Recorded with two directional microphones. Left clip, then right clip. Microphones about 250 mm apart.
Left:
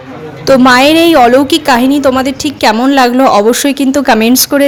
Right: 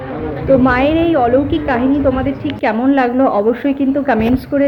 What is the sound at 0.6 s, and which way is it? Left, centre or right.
A woman's voice, left.